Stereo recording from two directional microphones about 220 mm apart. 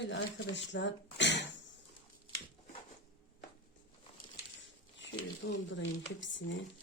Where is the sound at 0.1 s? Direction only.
55° left (ahead or behind).